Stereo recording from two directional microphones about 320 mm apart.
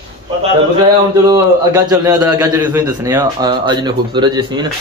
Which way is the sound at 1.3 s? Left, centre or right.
Centre.